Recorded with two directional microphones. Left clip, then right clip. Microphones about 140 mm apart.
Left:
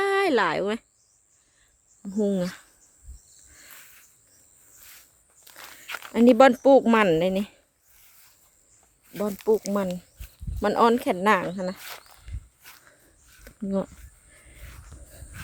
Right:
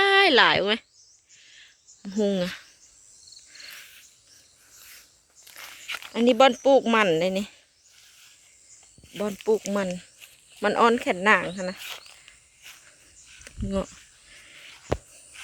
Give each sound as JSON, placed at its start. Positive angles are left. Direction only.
{"t": 0.0, "sound": "speech", "side_deg": 10}
{"t": 2.0, "sound": "speech", "side_deg": 15}
{"t": 5.5, "sound": "walk", "side_deg": 0}
{"t": 6.1, "sound": "speech", "side_deg": 50}
{"t": 9.7, "sound": "speech", "side_deg": 5}
{"t": 11.8, "sound": "speech", "side_deg": 5}
{"t": 13.4, "sound": "a sound", "side_deg": 25}